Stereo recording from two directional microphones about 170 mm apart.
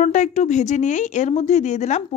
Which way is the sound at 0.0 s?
45° left (ahead or behind).